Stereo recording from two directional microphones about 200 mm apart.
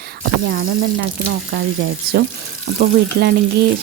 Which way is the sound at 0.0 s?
55° right (ahead or behind).